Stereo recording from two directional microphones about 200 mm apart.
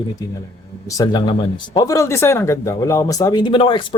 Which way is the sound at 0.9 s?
20° left (ahead or behind).